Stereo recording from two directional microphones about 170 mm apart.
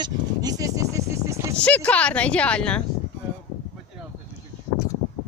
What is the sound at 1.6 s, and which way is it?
Speech, 10° left (ahead or behind).